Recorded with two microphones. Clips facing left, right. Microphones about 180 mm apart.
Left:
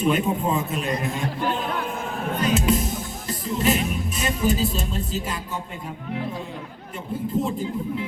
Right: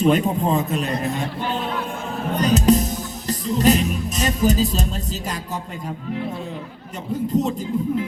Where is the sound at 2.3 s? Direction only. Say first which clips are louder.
Right 5 dB; 40° right (ahead or behind).